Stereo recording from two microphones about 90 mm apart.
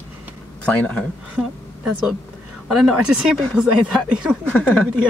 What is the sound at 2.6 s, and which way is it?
Speech, 5° right (ahead or behind).